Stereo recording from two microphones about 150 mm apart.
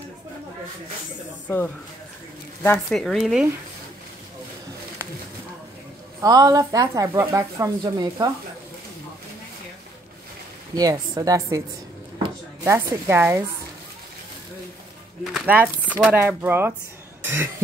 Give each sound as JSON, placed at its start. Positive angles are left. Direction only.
{"t": 2.9, "sound": "speech", "side_deg": 0}
{"t": 6.2, "sound": "speech", "side_deg": -25}
{"t": 10.7, "sound": "speech", "side_deg": -25}
{"t": 12.6, "sound": "speech", "side_deg": -20}
{"t": 15.3, "sound": "speech", "side_deg": -5}
{"t": 17.2, "sound": "cough", "side_deg": -15}